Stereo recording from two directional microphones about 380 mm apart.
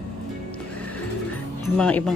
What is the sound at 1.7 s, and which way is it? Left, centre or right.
Speech, centre.